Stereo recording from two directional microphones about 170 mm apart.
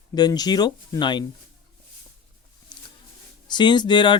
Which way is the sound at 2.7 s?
25° left (ahead or behind).